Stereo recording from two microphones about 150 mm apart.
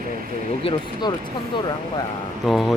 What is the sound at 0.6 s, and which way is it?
Speech, 35° left (ahead or behind).